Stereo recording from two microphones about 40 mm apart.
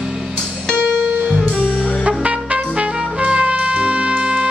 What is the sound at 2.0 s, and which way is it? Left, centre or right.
Trumpet, right.